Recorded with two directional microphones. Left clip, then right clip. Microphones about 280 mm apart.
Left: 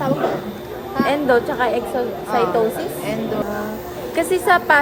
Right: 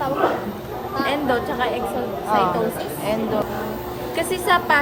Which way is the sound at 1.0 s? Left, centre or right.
Centre.